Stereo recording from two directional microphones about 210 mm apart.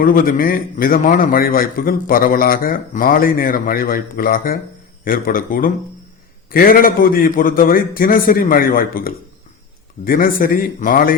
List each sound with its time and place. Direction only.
0.0 s a man's voice: 45° left (ahead or behind)